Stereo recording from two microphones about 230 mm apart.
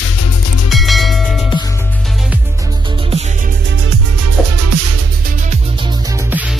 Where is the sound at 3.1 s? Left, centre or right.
Right.